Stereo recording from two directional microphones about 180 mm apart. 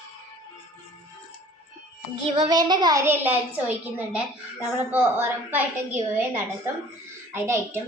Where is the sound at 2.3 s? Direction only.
25° right (ahead or behind); by 4.2 s 5° right (ahead or behind).